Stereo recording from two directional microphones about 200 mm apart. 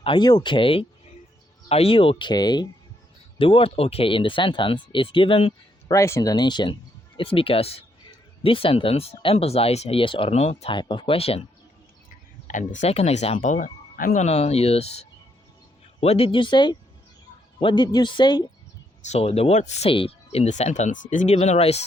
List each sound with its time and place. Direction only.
0.0 s speech: 25° left (ahead or behind)
5.9 s speech: 15° left (ahead or behind); by 11.4 s 30° left (ahead or behind)
12.5 s speech: 40° left (ahead or behind); by 18.4 s 20° left (ahead or behind)
19.0 s speech: 30° left (ahead or behind)